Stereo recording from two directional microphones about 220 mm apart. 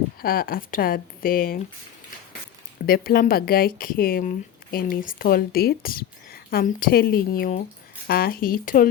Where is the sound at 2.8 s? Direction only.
40° left (ahead or behind).